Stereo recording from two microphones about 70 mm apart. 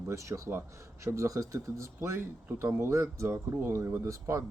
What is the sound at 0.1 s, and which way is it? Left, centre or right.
Speech, right.